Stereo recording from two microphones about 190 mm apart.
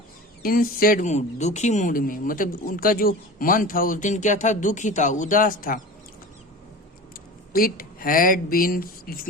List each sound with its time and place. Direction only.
0.4 s speech: 50° left (ahead or behind)
7.1 s speech: 50° left (ahead or behind)